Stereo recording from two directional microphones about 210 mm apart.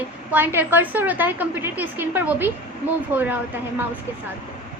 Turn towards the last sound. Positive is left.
turn(degrees=-10)  # may be behind; listen again after turning